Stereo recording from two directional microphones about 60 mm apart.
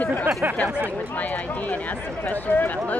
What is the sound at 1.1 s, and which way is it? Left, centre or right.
Speech, left.